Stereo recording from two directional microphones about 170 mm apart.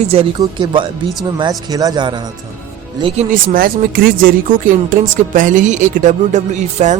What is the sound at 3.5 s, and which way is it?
Speech, 60° right (ahead or behind).